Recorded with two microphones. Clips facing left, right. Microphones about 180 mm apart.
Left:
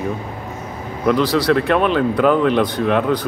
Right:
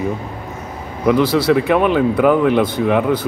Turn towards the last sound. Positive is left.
turn(degrees=-10)  # may be behind; listen again after turning